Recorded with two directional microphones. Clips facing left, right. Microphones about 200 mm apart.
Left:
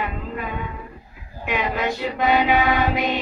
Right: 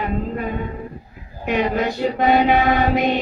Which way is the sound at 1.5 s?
40° right (ahead or behind).